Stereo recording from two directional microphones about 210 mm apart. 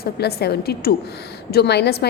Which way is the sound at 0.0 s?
50° left (ahead or behind).